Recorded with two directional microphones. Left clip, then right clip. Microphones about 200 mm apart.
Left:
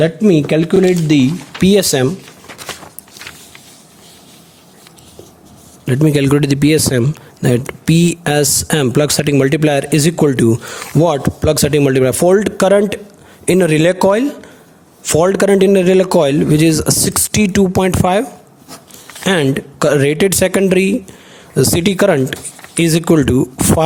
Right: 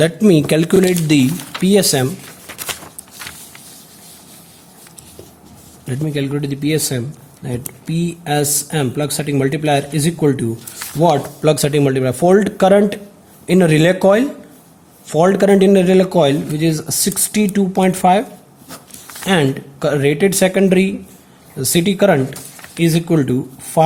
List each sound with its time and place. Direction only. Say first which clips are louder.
0.0 s speech: left 1 dB; centre (ahead or behind)
1.6 s speech: left 2 dB; 30° left (ahead or behind)
5.8 s a sound: left 10 dB; 30° left (ahead or behind)
6.1 s a man's voice: left 8 dB; 50° left (ahead or behind)
11.0 s a man's voice: even; 40° left (ahead or behind)
19.2 s a man's voice: left 2 dB; 40° left (ahead or behind)